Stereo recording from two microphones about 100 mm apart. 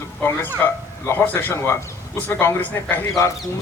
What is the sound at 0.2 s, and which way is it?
A man's voice, 20° left (ahead or behind).